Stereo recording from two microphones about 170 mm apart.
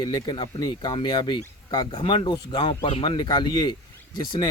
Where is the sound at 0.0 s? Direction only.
25° left (ahead or behind).